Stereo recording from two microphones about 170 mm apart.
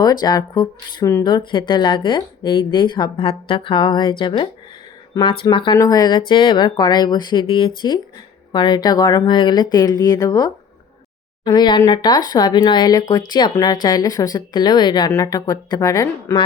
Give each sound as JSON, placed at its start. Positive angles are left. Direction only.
{"t": 0.0, "sound": "speech", "side_deg": 25}